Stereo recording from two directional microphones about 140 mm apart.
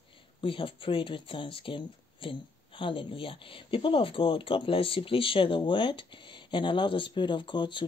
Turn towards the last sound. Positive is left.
turn(degrees=35)  # may be behind; listen again after turning